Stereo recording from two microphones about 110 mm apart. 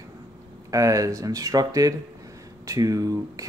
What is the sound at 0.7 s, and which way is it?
Speech, 30° right (ahead or behind).